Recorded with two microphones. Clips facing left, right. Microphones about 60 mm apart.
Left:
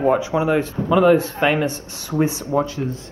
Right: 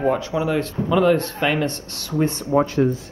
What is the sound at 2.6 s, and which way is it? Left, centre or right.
Speech, right.